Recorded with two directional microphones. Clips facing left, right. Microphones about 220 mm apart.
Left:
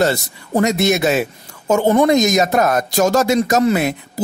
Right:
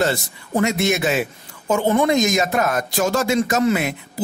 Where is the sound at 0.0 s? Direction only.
40° left (ahead or behind).